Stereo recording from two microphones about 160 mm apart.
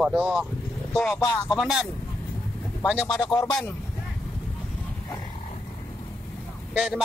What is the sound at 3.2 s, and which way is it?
Speech, 25° left (ahead or behind).